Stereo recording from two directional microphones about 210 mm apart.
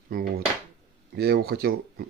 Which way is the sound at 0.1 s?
40° right (ahead or behind).